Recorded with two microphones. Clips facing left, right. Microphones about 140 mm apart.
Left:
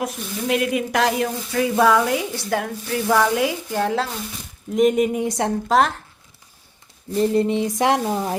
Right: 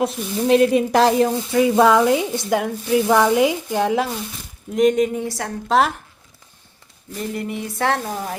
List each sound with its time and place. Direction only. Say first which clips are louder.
0.0 s sizzle: right 5 dB; 30° right (ahead or behind)
1.5 s speech: right 3 dB; 20° right (ahead or behind)
4.7 s speech: right 1 dB; 5° left (ahead or behind)
5.6 s speech: right 1 dB; centre (ahead or behind)
7.1 s speech: left 8 dB; 30° left (ahead or behind)